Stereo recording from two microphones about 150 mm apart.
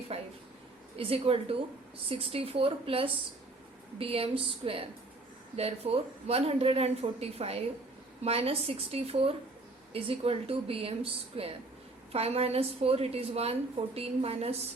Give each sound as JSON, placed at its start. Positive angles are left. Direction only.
{"t": 0.1, "sound": "a woman's voice", "side_deg": -45}